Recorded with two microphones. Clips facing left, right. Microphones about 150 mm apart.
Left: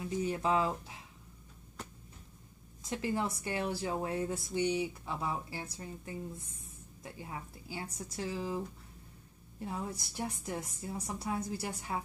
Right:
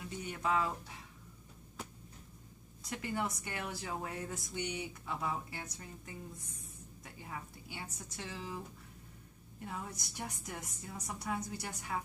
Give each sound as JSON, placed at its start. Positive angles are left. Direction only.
{"t": 0.2, "sound": "speech", "side_deg": 30}
{"t": 2.8, "sound": "a woman's voice", "side_deg": 25}
{"t": 9.7, "sound": "a woman's voice", "side_deg": 30}